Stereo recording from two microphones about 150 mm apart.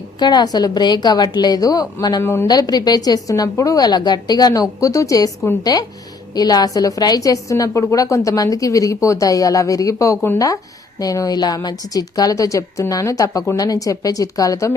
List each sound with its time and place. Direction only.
0.2 s a woman's voice: 30° left (ahead or behind)
2.2 s a woman's voice: 15° left (ahead or behind)